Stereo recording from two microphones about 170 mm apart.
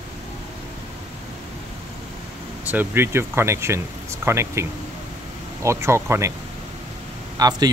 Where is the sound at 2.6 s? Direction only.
10° right (ahead or behind).